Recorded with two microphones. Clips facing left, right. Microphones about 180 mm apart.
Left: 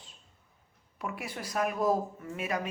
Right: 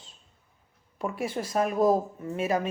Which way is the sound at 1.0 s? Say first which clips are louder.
Right 7 dB; 30° right (ahead or behind).